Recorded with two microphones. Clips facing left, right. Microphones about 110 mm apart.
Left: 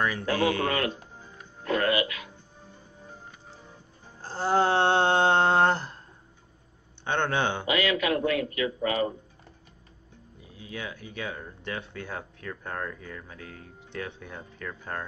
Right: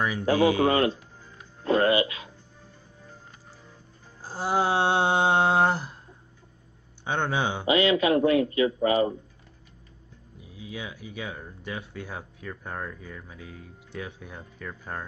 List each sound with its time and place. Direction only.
0.2 s speech: 15° right (ahead or behind)
0.7 s speech: 25° right (ahead or behind)
4.2 s a sound: 10° right (ahead or behind)
7.1 s speech: 10° right (ahead or behind)
7.6 s speech: 25° right (ahead or behind)
10.5 s speech: 10° right (ahead or behind)